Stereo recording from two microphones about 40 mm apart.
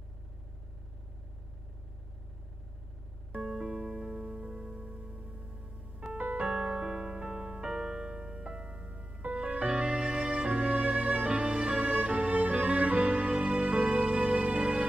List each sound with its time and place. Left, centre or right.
3.3 s music: right
6.1 s music: right
6.4 s music: right